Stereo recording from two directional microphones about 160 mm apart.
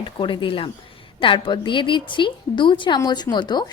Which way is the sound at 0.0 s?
30° left (ahead or behind).